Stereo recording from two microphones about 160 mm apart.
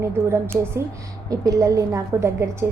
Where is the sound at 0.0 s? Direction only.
15° right (ahead or behind).